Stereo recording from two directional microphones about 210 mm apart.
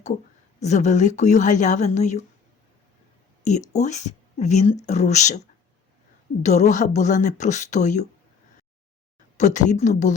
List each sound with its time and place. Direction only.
0.6 s speech: 35° left (ahead or behind)
3.7 s speech: 35° left (ahead or behind)
6.4 s speech: 35° left (ahead or behind)
9.4 s speech: 35° left (ahead or behind)